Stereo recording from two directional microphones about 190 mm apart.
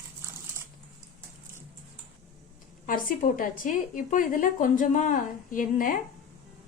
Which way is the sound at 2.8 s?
45° left (ahead or behind).